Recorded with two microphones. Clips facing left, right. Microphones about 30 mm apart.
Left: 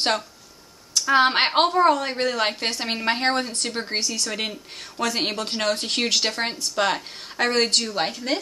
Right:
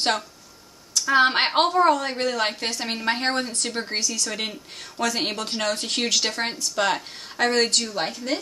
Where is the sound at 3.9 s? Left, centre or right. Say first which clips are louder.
Left 1 dB; left.